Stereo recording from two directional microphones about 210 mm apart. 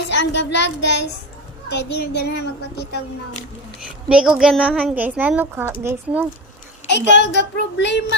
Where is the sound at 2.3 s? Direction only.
50° left (ahead or behind).